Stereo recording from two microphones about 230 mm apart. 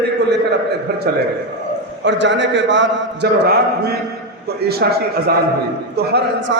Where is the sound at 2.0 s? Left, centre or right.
Right.